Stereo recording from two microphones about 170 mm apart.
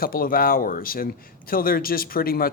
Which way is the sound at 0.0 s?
60° left (ahead or behind).